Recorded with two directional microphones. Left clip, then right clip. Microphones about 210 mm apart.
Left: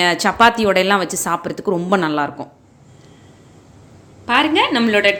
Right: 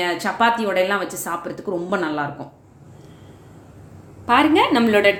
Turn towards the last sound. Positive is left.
turn(degrees=0)  # may be behind; listen again after turning